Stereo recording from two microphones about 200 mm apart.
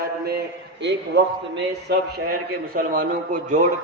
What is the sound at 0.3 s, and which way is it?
A man's voice, 55° right (ahead or behind).